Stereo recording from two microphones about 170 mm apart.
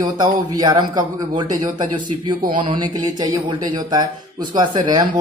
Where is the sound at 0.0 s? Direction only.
25° right (ahead or behind).